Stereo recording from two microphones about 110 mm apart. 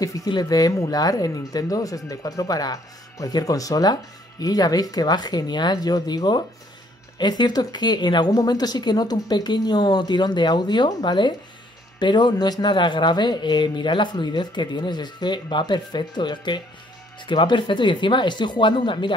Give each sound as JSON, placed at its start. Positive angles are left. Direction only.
{"t": 0.0, "sound": "speech", "side_deg": 35}